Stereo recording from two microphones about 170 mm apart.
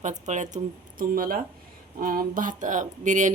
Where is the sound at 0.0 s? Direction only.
45° right (ahead or behind).